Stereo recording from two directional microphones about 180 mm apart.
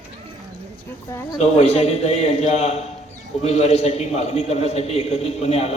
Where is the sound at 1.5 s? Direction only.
35° left (ahead or behind).